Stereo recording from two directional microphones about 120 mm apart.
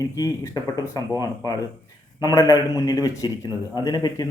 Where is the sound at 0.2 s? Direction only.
30° left (ahead or behind).